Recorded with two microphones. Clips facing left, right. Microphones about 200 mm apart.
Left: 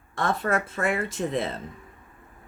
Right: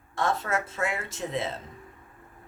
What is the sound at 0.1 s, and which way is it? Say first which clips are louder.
Speech: left 2 dB; 55° left (ahead or behind).